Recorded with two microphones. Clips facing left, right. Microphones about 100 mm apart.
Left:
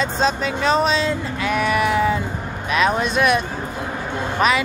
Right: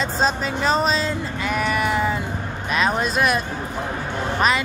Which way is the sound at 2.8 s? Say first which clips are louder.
Left 2 dB; 40° right (ahead or behind).